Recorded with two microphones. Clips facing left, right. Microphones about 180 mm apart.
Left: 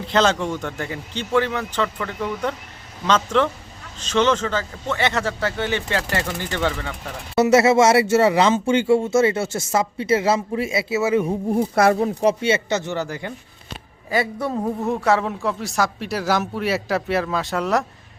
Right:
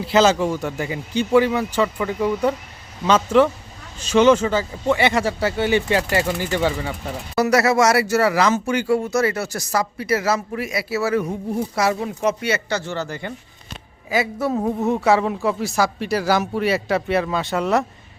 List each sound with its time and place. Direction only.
0.0 s speech: 5° right (ahead or behind)
7.3 s speech: 25° left (ahead or behind)
11.5 s speech: 55° left (ahead or behind); by 13.1 s 20° left (ahead or behind)
13.1 s a man's voice: 5° left (ahead or behind)